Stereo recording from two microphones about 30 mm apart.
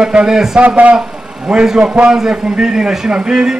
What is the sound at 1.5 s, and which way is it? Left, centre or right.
A man's voice, centre.